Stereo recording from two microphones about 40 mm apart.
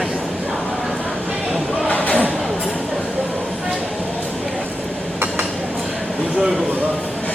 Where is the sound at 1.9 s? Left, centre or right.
Left.